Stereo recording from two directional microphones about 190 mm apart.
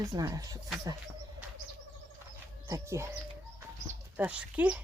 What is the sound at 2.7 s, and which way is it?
Speech, 15° right (ahead or behind).